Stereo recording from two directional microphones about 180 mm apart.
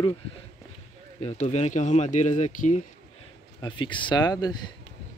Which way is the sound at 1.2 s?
40° left (ahead or behind).